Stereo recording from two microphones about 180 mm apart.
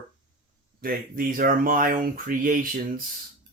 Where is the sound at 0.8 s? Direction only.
55° right (ahead or behind).